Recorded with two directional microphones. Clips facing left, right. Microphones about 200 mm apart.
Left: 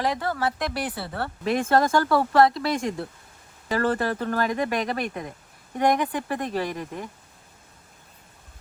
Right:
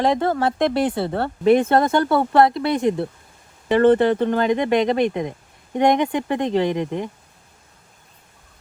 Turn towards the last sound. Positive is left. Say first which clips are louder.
# right 8 dB
turn(degrees=-20)  # may be behind; listen again after turning